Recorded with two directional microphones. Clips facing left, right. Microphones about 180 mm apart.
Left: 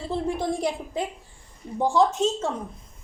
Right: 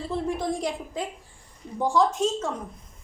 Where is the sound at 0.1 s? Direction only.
30° left (ahead or behind).